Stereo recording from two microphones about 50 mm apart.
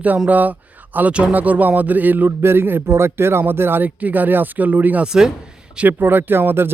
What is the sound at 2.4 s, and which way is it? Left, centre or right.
Speech, right.